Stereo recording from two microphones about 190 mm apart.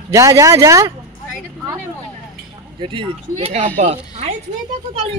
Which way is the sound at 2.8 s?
25° right (ahead or behind).